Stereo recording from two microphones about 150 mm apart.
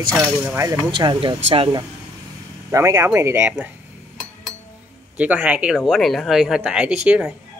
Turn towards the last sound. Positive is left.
turn(degrees=-5)  # may be behind; listen again after turning